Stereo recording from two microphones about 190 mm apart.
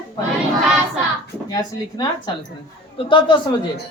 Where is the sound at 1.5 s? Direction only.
20° left (ahead or behind).